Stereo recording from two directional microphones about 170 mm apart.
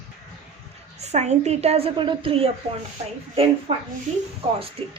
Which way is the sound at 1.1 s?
40° right (ahead or behind).